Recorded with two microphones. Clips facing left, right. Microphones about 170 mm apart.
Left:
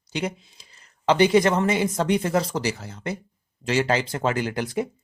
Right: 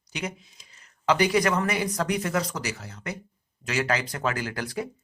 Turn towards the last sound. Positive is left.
turn(degrees=20)  # may be behind; listen again after turning